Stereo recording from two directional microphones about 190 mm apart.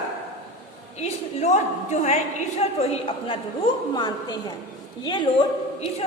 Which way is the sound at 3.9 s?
20° left (ahead or behind).